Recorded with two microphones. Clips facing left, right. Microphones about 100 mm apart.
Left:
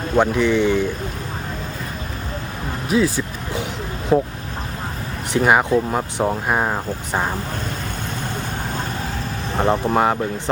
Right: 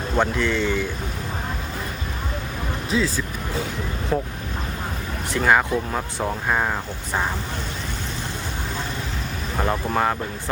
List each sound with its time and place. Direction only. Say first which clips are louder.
0.2 s speech: left 5 dB; 15° left (ahead or behind)
2.9 s speech: left 5 dB; 15° left (ahead or behind)
5.3 s speech: left 3 dB; 20° left (ahead or behind)
9.6 s speech: left 5 dB; 25° left (ahead or behind)